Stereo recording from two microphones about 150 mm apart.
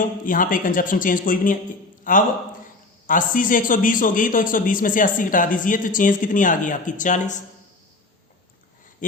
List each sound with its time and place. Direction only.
0.3 s a man's voice: 65° left (ahead or behind)